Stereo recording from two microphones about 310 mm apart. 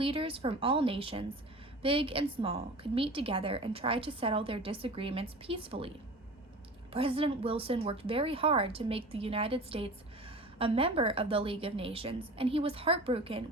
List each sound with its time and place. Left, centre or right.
0.0 s a woman's voice: centre
6.9 s a woman's voice: centre